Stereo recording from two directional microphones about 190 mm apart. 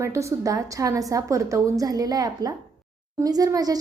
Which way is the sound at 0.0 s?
15° right (ahead or behind).